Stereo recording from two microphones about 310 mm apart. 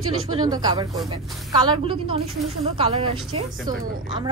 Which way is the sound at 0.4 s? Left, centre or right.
Centre.